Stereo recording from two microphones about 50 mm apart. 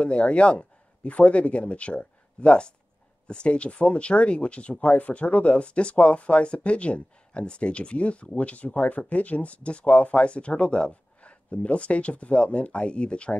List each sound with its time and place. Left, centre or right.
0.0 s a man's voice: left